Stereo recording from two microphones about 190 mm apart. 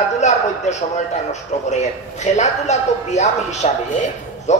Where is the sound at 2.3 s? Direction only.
35° left (ahead or behind).